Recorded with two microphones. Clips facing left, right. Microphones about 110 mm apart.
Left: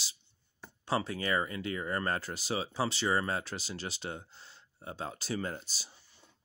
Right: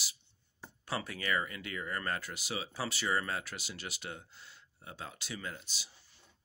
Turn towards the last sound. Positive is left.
turn(degrees=40)  # may be behind; listen again after turning